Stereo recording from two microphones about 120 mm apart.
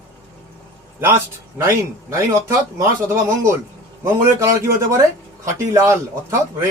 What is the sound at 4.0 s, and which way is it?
Speech, 25° right (ahead or behind).